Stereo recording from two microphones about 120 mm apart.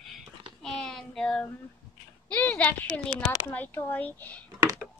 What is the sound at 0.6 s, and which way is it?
Child singing, 5° left (ahead or behind).